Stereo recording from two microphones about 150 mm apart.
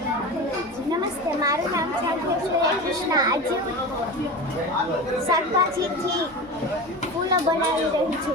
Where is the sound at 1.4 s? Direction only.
20° right (ahead or behind).